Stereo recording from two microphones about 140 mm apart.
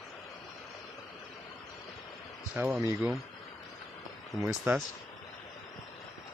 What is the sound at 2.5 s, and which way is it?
Speech, centre (ahead or behind).